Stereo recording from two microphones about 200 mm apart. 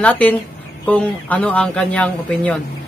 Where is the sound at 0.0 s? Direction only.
10° left (ahead or behind).